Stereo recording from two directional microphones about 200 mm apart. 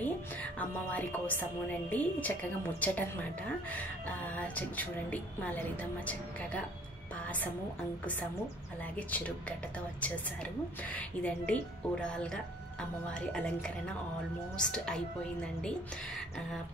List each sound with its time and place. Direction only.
0.0 s a woman's voice: 10° left (ahead or behind)
4.4 s a woman's voice: 10° left (ahead or behind)
8.0 s a woman's voice: 10° left (ahead or behind)